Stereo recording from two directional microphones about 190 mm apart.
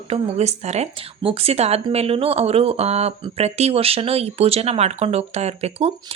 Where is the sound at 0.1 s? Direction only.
35° right (ahead or behind).